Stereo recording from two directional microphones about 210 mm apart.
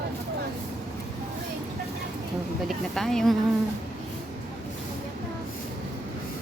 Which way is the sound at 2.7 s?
Centre (ahead or behind).